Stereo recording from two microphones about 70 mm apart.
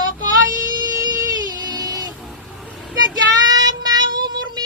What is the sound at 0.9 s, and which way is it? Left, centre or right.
Child singing, right.